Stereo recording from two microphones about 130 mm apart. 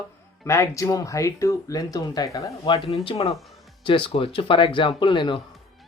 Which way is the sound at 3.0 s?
40° left (ahead or behind).